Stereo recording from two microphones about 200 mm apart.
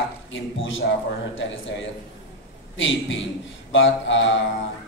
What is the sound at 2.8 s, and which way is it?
A man's voice, 70° left (ahead or behind).